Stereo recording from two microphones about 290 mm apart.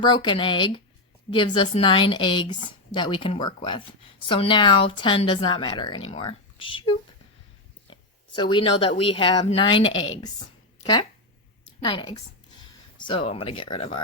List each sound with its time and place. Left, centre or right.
0.0 s speech: centre
8.4 s speech: centre
9.8 s speech: left
11.8 s speech: centre